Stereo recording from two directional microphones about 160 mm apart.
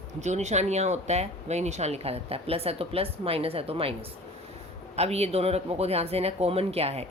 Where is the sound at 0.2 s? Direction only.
45° right (ahead or behind).